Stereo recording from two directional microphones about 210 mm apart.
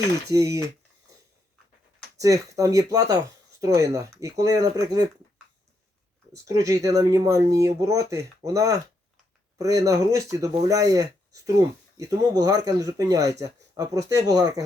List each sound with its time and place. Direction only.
0.3 s speech: 15° right (ahead or behind)
2.1 s speech: 15° right (ahead or behind)
6.3 s speech: 15° right (ahead or behind)